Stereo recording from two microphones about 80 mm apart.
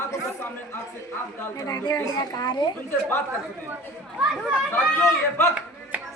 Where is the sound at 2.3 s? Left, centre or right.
Left.